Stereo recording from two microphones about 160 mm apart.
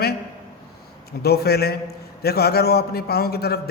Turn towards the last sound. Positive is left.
turn(degrees=80)